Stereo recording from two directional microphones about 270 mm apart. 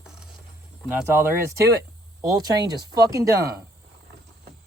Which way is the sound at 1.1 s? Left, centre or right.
Centre.